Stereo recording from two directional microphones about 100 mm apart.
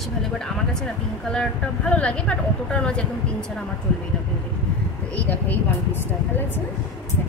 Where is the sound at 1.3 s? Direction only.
10° left (ahead or behind).